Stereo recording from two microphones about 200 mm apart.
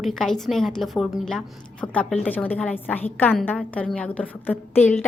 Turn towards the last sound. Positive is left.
turn(degrees=10)  # may be behind; listen again after turning